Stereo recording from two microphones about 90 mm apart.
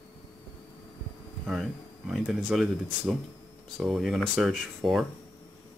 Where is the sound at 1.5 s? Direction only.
5° right (ahead or behind).